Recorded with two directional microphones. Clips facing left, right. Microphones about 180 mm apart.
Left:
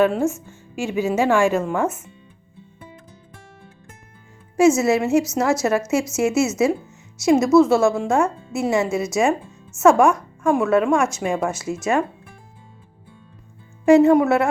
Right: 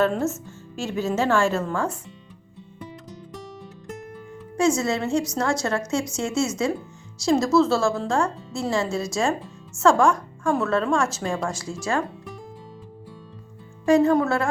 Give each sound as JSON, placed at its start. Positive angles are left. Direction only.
{"t": 0.0, "sound": "a woman's voice", "side_deg": 15}
{"t": 4.5, "sound": "speech", "side_deg": 25}
{"t": 13.8, "sound": "speech", "side_deg": 25}